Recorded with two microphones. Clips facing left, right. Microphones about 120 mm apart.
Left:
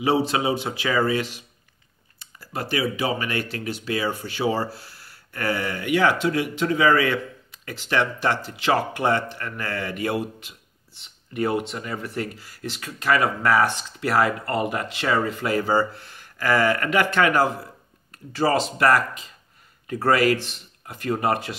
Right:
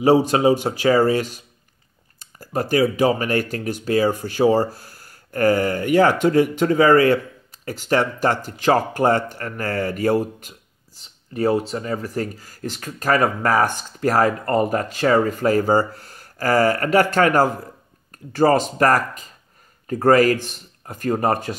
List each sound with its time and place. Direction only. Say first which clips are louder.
0.0 s speech: right 6 dB; 40° right (ahead or behind)